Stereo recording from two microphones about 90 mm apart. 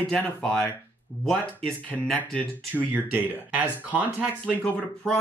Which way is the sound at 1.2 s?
5° left (ahead or behind).